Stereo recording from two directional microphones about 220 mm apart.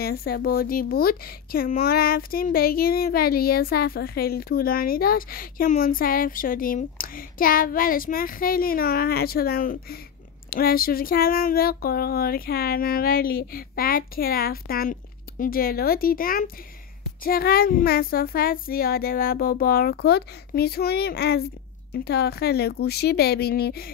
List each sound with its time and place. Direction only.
0.0 s speech: 45° left (ahead or behind)